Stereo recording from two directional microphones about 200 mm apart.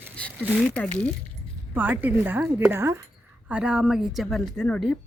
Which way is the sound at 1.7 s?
10° right (ahead or behind).